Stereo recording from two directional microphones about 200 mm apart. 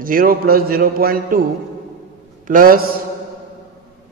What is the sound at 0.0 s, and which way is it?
A man's voice, 45° right (ahead or behind).